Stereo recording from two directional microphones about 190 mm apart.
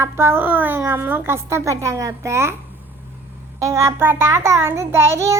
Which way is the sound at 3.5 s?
15° right (ahead or behind).